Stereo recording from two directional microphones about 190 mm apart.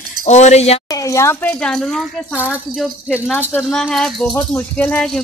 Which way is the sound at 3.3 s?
10° left (ahead or behind).